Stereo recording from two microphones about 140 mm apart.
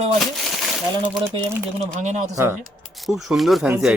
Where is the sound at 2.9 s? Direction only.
Centre (ahead or behind).